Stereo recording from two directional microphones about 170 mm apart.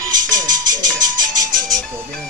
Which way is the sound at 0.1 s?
50° right (ahead or behind).